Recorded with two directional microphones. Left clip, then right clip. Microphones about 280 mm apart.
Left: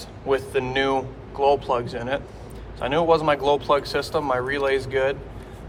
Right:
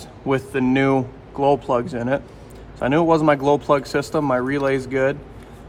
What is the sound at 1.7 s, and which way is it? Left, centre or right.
Speech, right.